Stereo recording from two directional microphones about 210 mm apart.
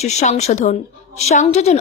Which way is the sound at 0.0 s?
30° left (ahead or behind).